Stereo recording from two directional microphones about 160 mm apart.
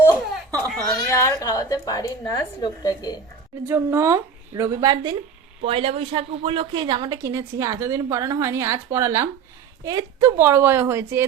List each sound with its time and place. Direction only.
0.9 s a woman's voice: 20° left (ahead or behind)
3.7 s a woman's voice: 20° right (ahead or behind)
5.6 s a woman's voice: 35° right (ahead or behind); by 11.2 s 15° right (ahead or behind)